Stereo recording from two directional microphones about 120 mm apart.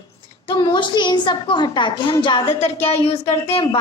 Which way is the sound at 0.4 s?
40° left (ahead or behind).